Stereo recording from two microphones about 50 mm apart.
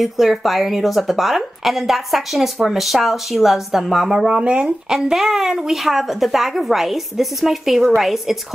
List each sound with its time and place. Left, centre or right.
0.0 s a woman's voice: centre
4.3 s speech: centre
4.9 s a woman's voice: centre